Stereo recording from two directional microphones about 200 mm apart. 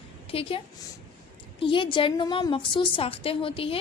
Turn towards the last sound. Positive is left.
turn(degrees=25)  # may be behind; listen again after turning